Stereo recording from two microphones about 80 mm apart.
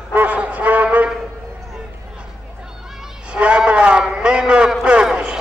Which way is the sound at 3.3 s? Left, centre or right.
Centre.